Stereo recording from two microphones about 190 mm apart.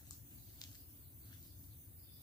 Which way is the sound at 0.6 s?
20° left (ahead or behind).